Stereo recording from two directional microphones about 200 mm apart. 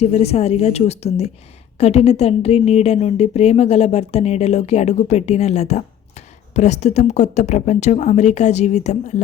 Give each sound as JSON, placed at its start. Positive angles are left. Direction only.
{"t": 0.0, "sound": "a woman's voice", "side_deg": 30}